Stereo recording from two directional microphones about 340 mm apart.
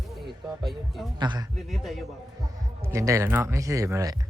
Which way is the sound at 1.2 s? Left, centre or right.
Centre.